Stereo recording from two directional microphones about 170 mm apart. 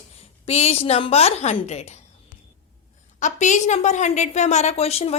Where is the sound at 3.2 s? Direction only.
45° left (ahead or behind).